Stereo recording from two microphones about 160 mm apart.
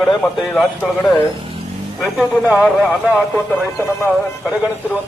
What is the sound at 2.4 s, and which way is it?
Speech, 5° right (ahead or behind).